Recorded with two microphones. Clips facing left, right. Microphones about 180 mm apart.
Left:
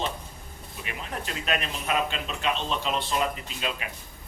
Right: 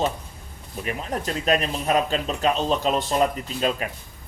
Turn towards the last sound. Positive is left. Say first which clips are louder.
# right 8 dB
turn(degrees=-40)  # may be behind; listen again after turning